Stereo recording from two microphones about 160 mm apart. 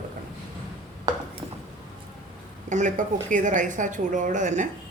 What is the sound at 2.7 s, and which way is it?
Speech, 50° right (ahead or behind).